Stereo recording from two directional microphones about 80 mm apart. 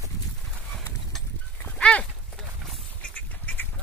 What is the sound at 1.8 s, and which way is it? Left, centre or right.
Horse, centre.